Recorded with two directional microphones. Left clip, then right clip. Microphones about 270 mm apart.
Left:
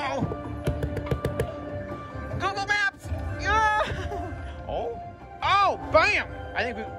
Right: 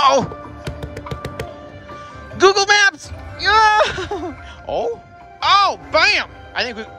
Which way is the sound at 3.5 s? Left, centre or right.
Centre.